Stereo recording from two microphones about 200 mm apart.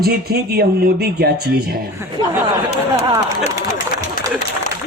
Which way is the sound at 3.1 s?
20° right (ahead or behind).